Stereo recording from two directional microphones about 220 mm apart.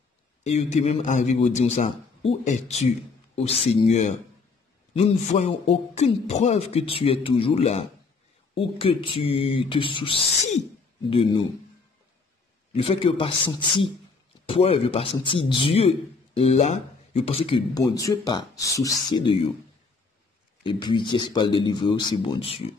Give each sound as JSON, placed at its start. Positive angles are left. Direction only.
{"t": 0.4, "sound": "a man's voice", "side_deg": 30}
{"t": 12.7, "sound": "speech", "side_deg": 25}
{"t": 20.6, "sound": "speech", "side_deg": 20}